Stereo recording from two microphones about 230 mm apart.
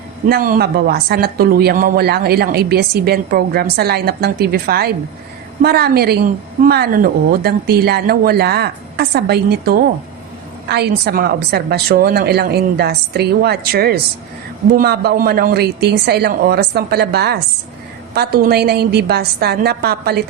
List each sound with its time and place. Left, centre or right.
0.3 s speech: right